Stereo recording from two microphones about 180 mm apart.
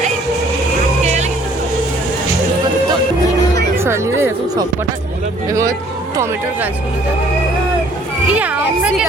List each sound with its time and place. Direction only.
1.0 s vehicle: 40° right (ahead or behind)
3.8 s speech: 15° right (ahead or behind)
8.3 s a woman's voice: 5° right (ahead or behind)